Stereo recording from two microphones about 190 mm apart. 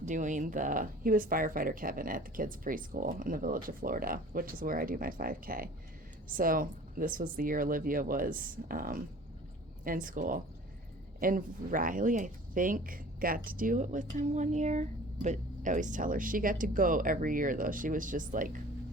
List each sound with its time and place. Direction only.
0.0 s speech: 40° right (ahead or behind)